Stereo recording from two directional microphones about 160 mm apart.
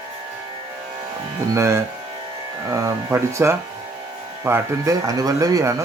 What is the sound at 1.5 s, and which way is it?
Speech, 15° right (ahead or behind).